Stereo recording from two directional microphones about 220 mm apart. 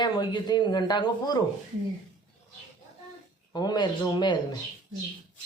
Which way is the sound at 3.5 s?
20° left (ahead or behind).